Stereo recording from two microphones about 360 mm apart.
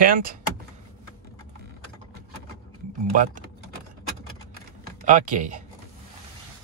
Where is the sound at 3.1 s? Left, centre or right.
Right.